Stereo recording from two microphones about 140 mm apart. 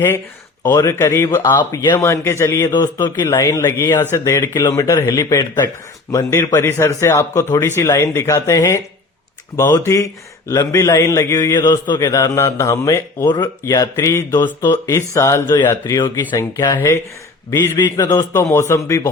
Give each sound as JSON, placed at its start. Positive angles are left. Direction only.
{"t": 0.7, "sound": "a man's voice", "side_deg": 20}
{"t": 9.8, "sound": "a man's voice", "side_deg": 20}